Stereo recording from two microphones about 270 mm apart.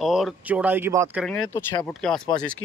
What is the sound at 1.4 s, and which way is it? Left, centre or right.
Speech, centre.